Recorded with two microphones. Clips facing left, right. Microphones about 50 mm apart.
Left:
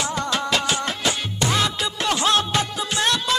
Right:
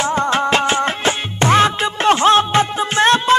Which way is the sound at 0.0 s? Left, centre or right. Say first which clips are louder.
Right 8 dB; right.